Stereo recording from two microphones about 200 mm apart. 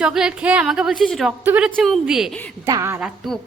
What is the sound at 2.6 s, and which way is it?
Speech, 15° right (ahead or behind).